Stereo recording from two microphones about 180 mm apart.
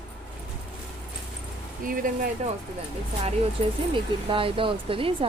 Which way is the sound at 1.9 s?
50° right (ahead or behind).